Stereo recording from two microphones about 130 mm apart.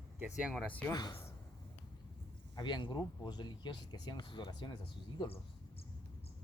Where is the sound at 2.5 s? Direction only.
35° left (ahead or behind).